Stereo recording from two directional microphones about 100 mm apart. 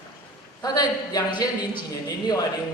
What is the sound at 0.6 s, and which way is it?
A man's voice, 40° left (ahead or behind).